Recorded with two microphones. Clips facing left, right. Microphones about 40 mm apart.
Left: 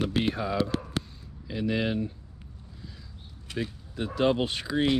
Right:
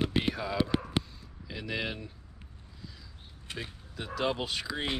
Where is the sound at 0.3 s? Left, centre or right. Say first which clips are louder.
Left 3 dB; left.